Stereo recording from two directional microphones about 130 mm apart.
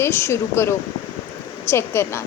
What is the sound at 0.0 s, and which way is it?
A woman's voice, 20° left (ahead or behind).